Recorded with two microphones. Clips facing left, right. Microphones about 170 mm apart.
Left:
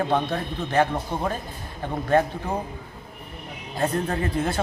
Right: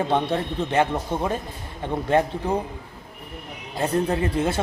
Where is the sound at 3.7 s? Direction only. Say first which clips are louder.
Right 2 dB; 20° right (ahead or behind).